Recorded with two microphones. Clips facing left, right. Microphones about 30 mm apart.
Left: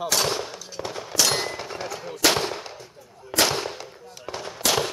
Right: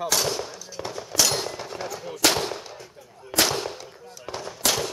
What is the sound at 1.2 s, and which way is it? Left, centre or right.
Gunshot, left.